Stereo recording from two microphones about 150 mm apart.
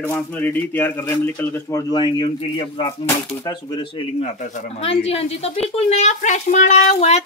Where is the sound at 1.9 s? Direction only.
30° left (ahead or behind).